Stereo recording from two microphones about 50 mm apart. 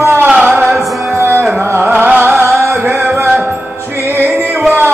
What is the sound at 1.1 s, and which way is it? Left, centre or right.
Music, right.